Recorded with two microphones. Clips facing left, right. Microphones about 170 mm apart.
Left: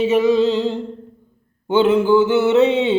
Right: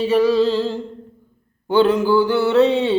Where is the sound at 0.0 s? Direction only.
20° left (ahead or behind).